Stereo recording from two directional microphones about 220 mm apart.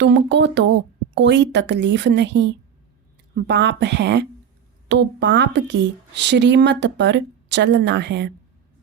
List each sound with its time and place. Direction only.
0.0 s a woman's voice: 55° right (ahead or behind)